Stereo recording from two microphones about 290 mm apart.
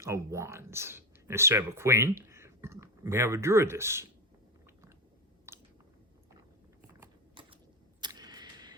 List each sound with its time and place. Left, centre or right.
0.0 s speech: centre
4.6 s chewing: centre
7.0 s mechanisms: centre
8.0 s a sound: centre